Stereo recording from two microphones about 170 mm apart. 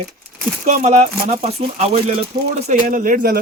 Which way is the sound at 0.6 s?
40° right (ahead or behind).